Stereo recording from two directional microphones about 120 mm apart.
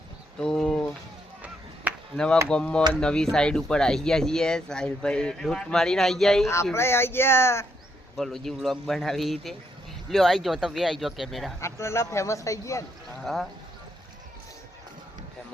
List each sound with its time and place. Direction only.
0.3 s a sound: 5° left (ahead or behind)
2.1 s speech: 5° left (ahead or behind)
6.7 s speech: 20° left (ahead or behind)
8.1 s speech: 5° left (ahead or behind)
11.6 s speech: 20° left (ahead or behind)
13.2 s speech: centre (ahead or behind)